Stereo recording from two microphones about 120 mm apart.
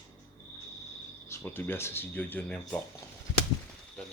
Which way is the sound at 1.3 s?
15° left (ahead or behind).